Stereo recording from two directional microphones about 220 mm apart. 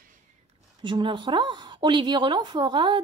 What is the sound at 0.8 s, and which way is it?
A woman's voice, 20° right (ahead or behind).